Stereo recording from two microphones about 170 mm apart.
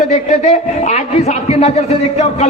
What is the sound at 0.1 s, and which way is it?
A man's voice, 40° left (ahead or behind).